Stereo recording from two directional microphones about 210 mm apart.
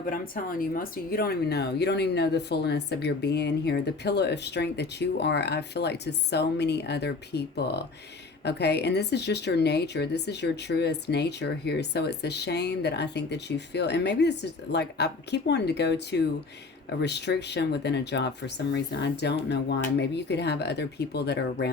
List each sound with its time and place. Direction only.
0.0 s speech: 40° left (ahead or behind)